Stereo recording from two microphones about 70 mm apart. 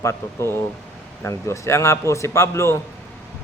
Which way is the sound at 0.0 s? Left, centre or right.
Left.